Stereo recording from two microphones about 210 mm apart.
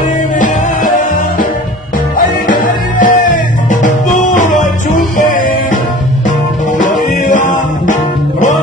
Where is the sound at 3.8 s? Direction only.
35° left (ahead or behind).